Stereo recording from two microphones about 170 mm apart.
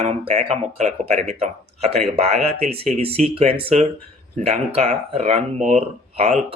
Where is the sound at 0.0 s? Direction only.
35° right (ahead or behind).